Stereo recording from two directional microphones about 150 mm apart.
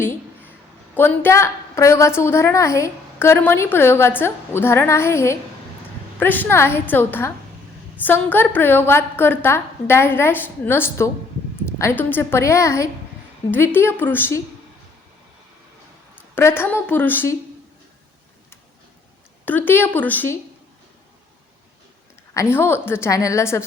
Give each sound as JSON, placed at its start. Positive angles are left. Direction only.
{"t": 0.0, "sound": "a sound", "side_deg": 15}
{"t": 0.9, "sound": "a woman's voice", "side_deg": 15}
{"t": 16.1, "sound": "speech", "side_deg": 15}
{"t": 19.5, "sound": "a woman's voice", "side_deg": 15}
{"t": 22.4, "sound": "a woman's voice", "side_deg": 15}